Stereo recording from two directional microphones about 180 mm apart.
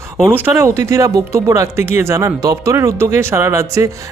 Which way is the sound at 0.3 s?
10° right (ahead or behind).